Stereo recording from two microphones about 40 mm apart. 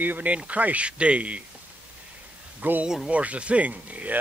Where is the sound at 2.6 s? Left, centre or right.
Right.